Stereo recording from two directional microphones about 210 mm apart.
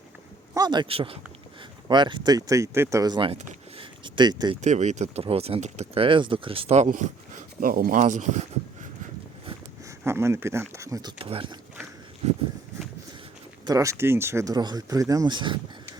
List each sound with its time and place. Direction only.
0.5 s speech: 20° right (ahead or behind)
4.6 s speech: 35° right (ahead or behind)
10.0 s speech: 10° right (ahead or behind)
13.7 s speech: 15° right (ahead or behind)